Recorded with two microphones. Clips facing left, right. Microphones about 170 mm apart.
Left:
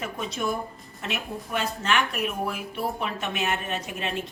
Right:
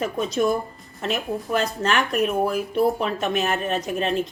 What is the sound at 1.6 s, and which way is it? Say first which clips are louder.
A woman's voice: right 2 dB; 40° right (ahead or behind).